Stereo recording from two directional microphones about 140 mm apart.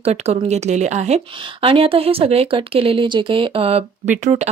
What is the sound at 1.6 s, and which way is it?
A woman's voice, 40° right (ahead or behind).